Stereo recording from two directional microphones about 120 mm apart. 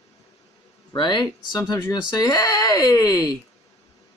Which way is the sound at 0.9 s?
40° left (ahead or behind).